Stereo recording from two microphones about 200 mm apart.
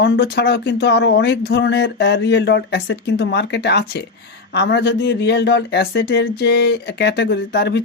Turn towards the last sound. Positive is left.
turn(degrees=55)  # may be behind; listen again after turning